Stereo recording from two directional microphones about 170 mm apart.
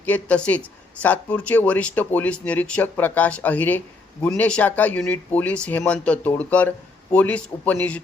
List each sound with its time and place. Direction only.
0.0 s speech: 10° left (ahead or behind)